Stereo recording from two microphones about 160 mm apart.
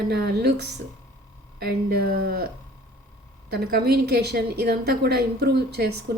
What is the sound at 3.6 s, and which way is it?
A woman's voice, 80° right.